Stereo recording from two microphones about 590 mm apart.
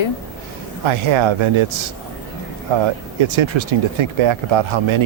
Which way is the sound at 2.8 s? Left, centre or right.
Right.